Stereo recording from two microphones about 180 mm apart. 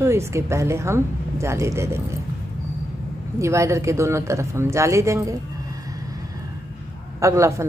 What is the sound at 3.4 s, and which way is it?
Speech, 15° right (ahead or behind).